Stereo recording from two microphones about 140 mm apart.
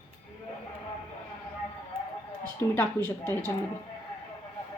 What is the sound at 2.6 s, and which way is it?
Speech, 20° left (ahead or behind).